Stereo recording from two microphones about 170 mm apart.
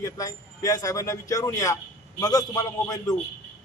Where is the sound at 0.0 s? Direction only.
20° left (ahead or behind).